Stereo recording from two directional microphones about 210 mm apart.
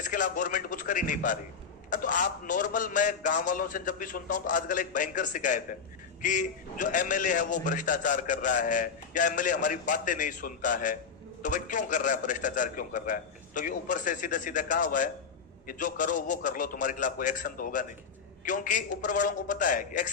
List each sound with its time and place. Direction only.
0.0 s a man's voice: 40° left (ahead or behind)